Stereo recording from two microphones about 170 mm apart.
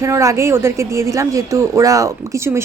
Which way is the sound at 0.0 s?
20° right (ahead or behind).